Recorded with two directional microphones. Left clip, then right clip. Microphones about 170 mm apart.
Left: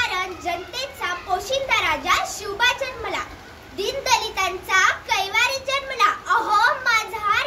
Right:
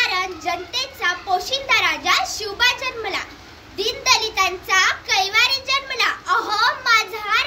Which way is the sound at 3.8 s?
15° left (ahead or behind).